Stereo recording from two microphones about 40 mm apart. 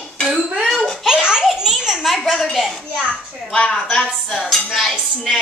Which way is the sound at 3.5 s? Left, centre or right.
Centre.